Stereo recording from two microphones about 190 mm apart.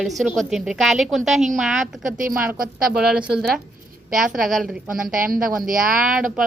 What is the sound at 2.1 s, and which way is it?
Speech, 45° right (ahead or behind).